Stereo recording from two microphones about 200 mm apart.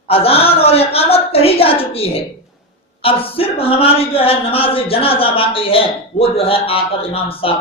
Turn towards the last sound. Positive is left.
turn(degrees=30)  # may be behind; listen again after turning